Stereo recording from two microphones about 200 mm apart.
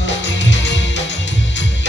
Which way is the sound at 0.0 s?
65° left (ahead or behind).